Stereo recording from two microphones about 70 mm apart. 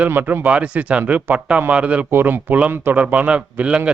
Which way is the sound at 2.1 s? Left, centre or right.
Right.